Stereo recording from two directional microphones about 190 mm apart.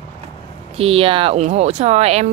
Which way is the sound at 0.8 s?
30° right (ahead or behind).